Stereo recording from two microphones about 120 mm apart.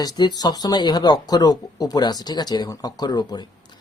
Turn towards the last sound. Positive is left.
turn(degrees=35)  # may be behind; listen again after turning